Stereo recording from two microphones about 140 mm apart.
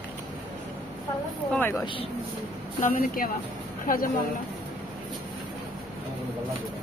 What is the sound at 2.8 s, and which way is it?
Speech, 85° left.